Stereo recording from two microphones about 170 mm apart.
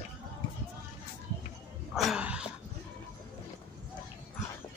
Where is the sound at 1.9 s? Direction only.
5° right (ahead or behind).